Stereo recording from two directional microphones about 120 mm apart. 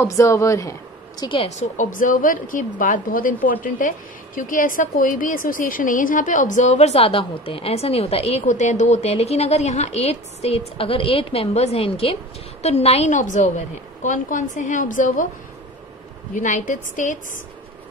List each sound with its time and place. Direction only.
0.0 s a woman's voice: 25° left (ahead or behind)
1.2 s a woman's voice: 45° left (ahead or behind)
1.8 s a woman's voice: 90° left
8.9 s a woman's voice: 60° left (ahead or behind); by 15.2 s 90° left
16.3 s a woman's voice: 90° left